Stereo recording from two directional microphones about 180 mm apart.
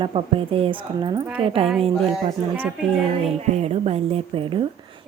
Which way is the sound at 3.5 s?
35° right (ahead or behind).